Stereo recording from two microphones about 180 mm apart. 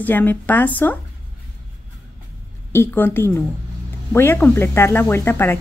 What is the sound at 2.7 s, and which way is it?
A woman's voice, 10° left (ahead or behind).